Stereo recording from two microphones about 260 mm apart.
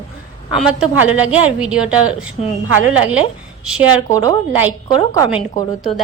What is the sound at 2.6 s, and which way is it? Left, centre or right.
A woman's voice, right.